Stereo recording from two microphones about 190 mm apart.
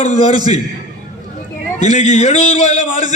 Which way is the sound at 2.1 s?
35° left (ahead or behind).